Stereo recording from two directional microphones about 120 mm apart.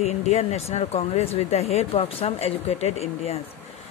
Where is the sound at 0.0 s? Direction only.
65° left (ahead or behind).